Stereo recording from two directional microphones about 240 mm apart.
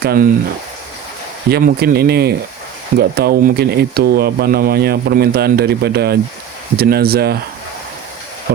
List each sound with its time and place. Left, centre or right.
0.0 s speech: right
1.5 s speech: right
8.5 s speech: right